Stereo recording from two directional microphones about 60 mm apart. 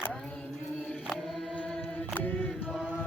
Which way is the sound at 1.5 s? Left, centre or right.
Centre.